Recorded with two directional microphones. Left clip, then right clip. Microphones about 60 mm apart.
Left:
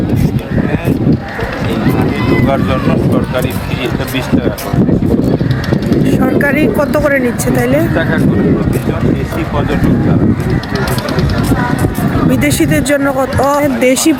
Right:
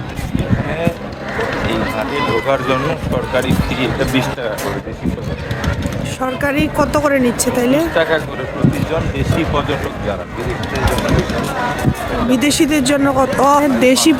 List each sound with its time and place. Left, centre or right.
6.1 s speech: left
12.3 s speech: left